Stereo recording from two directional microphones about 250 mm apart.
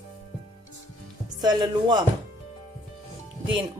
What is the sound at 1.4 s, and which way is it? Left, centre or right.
Speech, centre.